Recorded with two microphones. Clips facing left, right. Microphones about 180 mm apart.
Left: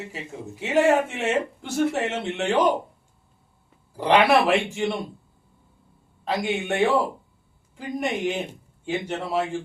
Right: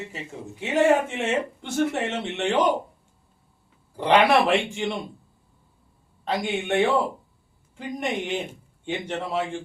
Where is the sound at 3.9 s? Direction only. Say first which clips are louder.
Even; centre (ahead or behind).